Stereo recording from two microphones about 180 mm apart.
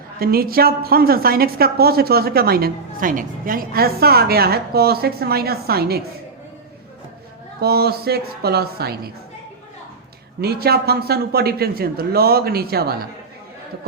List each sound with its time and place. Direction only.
0.2 s a woman's voice: 55° right (ahead or behind)
7.6 s a woman's voice: 60° right (ahead or behind)
10.4 s a woman's voice: 60° right (ahead or behind)